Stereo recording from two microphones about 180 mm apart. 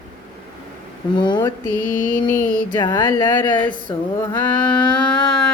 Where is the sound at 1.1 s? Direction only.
25° left (ahead or behind).